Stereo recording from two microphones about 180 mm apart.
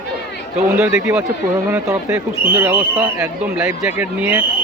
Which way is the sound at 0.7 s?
10° right (ahead or behind).